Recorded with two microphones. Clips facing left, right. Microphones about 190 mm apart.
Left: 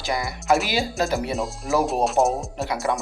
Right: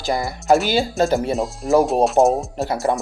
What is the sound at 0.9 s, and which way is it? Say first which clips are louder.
Speech: right 6 dB; 30° right (ahead or behind).